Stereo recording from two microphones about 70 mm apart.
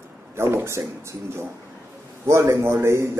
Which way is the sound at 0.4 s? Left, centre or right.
Right.